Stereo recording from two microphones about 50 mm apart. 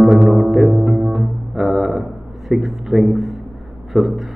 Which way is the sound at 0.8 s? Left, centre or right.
Centre.